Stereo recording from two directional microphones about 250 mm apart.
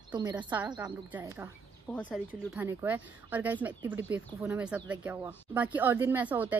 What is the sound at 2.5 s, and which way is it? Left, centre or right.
Speech, centre.